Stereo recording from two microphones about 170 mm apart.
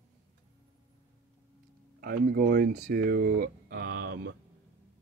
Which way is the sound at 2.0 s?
65° right (ahead or behind).